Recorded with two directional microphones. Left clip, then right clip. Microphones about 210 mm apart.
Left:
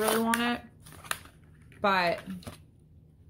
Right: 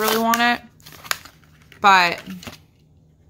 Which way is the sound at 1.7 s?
25° right (ahead or behind).